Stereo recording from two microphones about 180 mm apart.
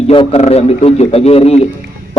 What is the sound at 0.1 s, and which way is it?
A man's voice, 30° left (ahead or behind).